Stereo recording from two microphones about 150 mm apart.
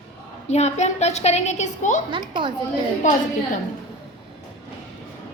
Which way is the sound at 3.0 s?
55° left (ahead or behind).